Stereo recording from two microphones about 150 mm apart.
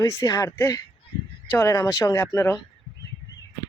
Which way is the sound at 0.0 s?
20° left (ahead or behind).